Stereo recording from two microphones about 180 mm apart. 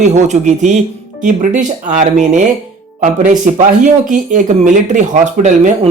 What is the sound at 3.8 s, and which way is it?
Speech, 45° right (ahead or behind).